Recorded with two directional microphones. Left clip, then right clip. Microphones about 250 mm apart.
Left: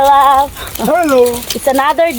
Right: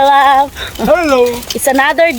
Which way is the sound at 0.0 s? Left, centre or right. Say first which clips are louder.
Even; centre.